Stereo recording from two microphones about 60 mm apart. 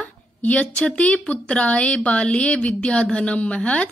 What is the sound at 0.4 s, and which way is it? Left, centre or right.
A woman's voice, left.